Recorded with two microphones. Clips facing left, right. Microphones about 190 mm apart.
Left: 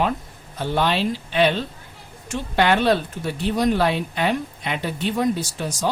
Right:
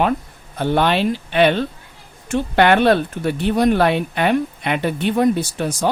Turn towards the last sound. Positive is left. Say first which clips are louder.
# right 5 dB
turn(degrees=-60)  # may be behind; listen again after turning